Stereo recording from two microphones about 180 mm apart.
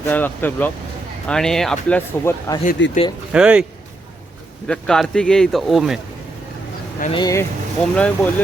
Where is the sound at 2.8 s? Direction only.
90° left.